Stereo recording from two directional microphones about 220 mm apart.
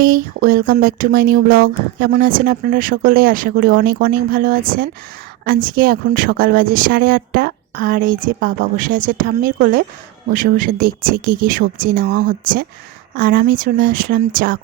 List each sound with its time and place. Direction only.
0.0 s speech: 40° right (ahead or behind)